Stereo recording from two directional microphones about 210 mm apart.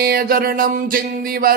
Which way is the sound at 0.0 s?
45° right (ahead or behind).